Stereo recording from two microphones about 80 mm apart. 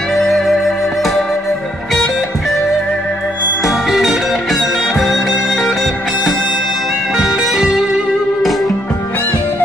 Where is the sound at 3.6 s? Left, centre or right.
Centre.